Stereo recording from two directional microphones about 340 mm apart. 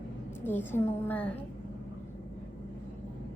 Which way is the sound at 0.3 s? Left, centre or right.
Centre.